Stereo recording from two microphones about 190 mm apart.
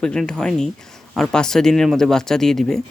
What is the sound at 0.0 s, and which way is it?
Speech, 5° left (ahead or behind).